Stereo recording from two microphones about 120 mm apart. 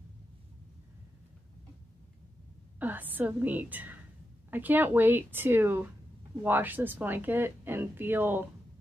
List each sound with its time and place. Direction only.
2.8 s a woman's voice: 15° right (ahead or behind)